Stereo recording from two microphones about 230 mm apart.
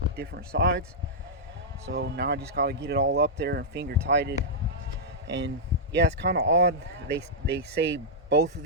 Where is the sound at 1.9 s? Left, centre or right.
Right.